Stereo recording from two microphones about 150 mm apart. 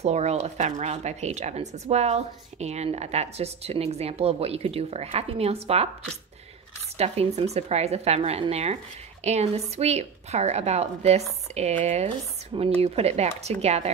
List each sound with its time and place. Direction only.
0.0 s speech: 45° right (ahead or behind)
7.0 s speech: 45° right (ahead or behind)